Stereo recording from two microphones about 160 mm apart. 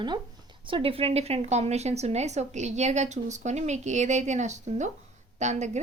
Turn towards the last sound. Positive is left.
turn(degrees=-45)  # may be behind; listen again after turning